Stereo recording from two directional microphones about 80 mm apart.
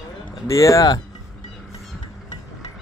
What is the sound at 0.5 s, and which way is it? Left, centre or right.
Speech, left.